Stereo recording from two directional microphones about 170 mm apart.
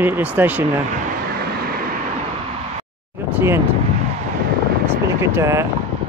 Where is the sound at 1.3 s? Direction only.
65° right (ahead or behind).